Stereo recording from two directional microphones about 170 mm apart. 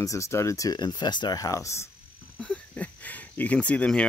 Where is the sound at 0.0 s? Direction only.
20° left (ahead or behind).